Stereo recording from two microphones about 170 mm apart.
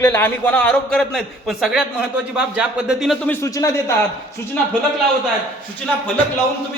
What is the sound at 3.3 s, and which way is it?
Speech, 20° left (ahead or behind).